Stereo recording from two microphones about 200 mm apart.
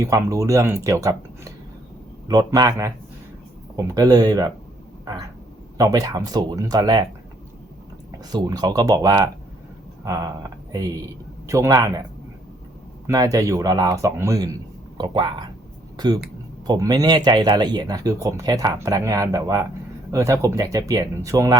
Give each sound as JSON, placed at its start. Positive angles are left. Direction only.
{"t": 0.0, "sound": "speech", "side_deg": -15}
{"t": 5.7, "sound": "speech", "side_deg": -15}
{"t": 8.3, "sound": "speech", "side_deg": -20}
{"t": 10.0, "sound": "a sound", "side_deg": -15}
{"t": 10.7, "sound": "speech", "side_deg": -15}
{"t": 13.1, "sound": "speech", "side_deg": -15}